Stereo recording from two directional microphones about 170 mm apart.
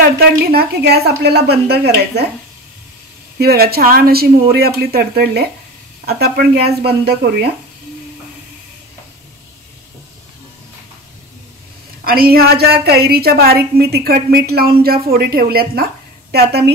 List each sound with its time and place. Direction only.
0.0 s a woman's voice: 65° right (ahead or behind)
3.3 s a woman's voice: 65° right (ahead or behind)
12.0 s a woman's voice: 60° right (ahead or behind)